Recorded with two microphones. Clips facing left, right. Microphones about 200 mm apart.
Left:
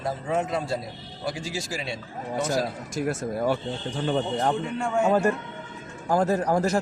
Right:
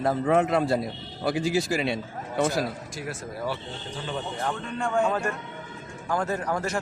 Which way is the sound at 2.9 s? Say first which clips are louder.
Left 8 dB; 45° left (ahead or behind).